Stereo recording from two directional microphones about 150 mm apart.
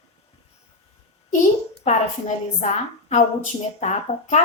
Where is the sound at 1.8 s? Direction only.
50° left (ahead or behind).